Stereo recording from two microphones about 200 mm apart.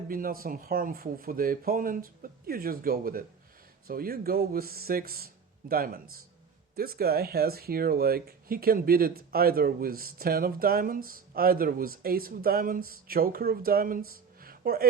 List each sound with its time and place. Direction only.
0.1 s speech: 45° right (ahead or behind)